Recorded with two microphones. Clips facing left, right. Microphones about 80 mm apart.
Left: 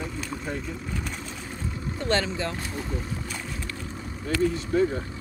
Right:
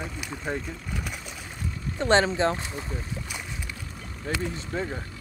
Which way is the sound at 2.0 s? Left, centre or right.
Right.